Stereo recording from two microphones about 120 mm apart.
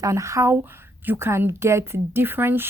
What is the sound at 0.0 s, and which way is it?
Speech, 25° right (ahead or behind).